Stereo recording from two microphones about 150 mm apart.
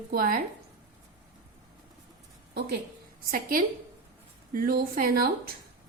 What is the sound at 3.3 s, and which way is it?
A woman's voice, 70° right (ahead or behind).